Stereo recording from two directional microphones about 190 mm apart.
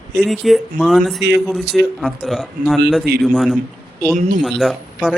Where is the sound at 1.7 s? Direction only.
Centre (ahead or behind).